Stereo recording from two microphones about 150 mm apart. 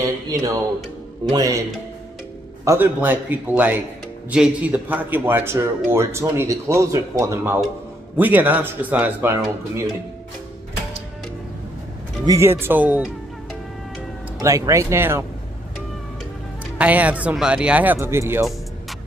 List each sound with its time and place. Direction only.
0.3 s speech: 25° right (ahead or behind)
2.6 s a man's voice: 15° right (ahead or behind)
12.3 s a man's voice: 15° right (ahead or behind)
14.4 s speech: 20° right (ahead or behind)
16.7 s a man's voice: 10° right (ahead or behind)